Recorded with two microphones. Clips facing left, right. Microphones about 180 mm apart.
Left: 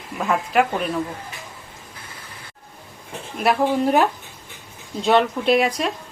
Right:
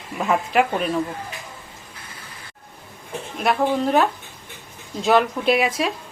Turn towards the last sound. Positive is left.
turn(degrees=0)  # may be behind; listen again after turning